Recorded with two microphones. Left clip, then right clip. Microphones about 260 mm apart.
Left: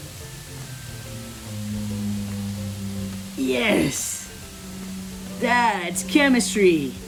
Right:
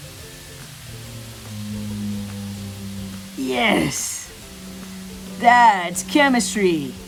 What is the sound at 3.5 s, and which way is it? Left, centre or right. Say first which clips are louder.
Speech: right 2 dB; right.